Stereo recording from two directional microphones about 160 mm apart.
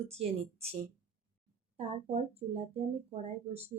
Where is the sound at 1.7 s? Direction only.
40° right (ahead or behind).